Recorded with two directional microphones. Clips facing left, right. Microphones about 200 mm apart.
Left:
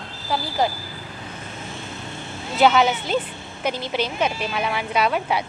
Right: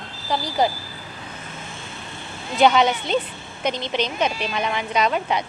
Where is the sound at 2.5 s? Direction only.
5° left (ahead or behind).